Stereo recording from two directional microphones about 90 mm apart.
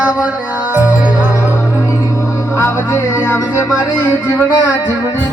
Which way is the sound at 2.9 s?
35° left (ahead or behind).